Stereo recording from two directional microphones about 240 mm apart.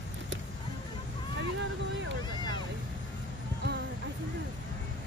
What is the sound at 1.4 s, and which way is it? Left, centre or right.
Vehicle, right.